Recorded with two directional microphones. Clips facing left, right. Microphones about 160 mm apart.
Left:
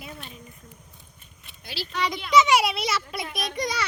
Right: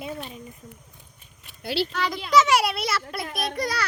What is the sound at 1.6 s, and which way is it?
Speech, 65° right (ahead or behind).